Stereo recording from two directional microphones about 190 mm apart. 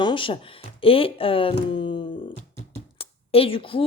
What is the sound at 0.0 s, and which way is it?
Speech, 25° left (ahead or behind).